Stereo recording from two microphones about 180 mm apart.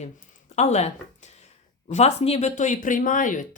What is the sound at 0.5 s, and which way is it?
Speech, 40° left (ahead or behind).